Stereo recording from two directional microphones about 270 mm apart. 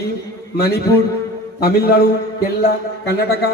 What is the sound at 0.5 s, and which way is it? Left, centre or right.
A man's voice, left.